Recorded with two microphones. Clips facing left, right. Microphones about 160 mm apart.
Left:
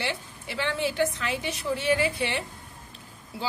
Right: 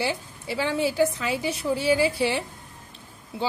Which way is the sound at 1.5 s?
30° right (ahead or behind).